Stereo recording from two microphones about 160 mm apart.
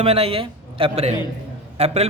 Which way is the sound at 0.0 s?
40° right (ahead or behind).